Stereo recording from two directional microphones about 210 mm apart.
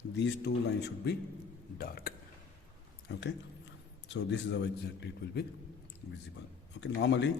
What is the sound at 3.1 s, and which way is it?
Speech, 50° left (ahead or behind).